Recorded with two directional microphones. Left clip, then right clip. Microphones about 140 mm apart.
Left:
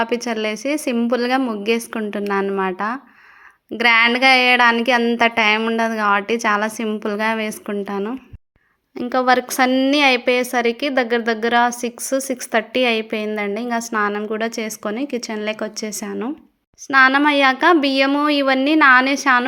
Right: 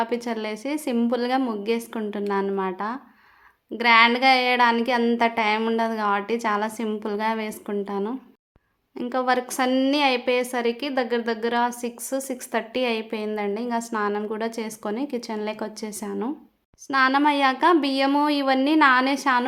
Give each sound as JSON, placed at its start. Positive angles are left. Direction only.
{"t": 0.0, "sound": "a woman's voice", "side_deg": 25}